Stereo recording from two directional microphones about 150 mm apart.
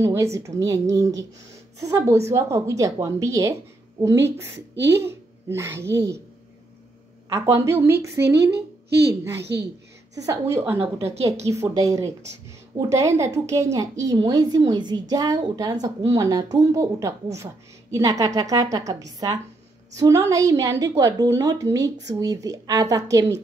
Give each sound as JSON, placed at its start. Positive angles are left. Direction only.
{"t": 0.0, "sound": "a woman's voice", "side_deg": -20}
{"t": 7.3, "sound": "a woman's voice", "side_deg": -20}
{"t": 10.1, "sound": "a woman's voice", "side_deg": -20}
{"t": 11.0, "sound": "a woman's voice", "side_deg": -45}
{"t": 11.4, "sound": "a woman's voice", "side_deg": -20}